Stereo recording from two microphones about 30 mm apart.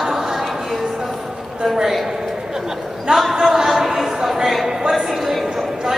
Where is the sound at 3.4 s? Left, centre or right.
Centre.